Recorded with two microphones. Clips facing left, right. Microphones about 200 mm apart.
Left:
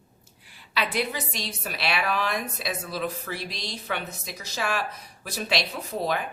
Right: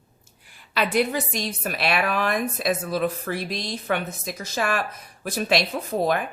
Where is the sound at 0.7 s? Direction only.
50° right (ahead or behind).